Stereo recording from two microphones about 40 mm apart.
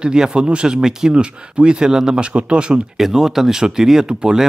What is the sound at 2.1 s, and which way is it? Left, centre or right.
Speech, right.